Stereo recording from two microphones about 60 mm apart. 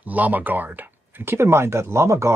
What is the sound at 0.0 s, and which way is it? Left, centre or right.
Speech, right.